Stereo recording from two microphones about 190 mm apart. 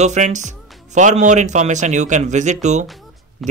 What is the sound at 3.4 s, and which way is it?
Speech, centre (ahead or behind).